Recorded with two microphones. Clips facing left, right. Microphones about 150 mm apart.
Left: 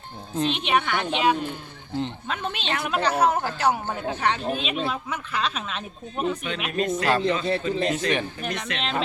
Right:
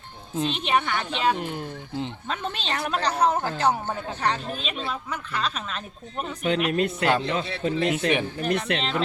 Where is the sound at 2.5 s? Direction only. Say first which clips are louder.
Left 1 dB; 35° right (ahead or behind).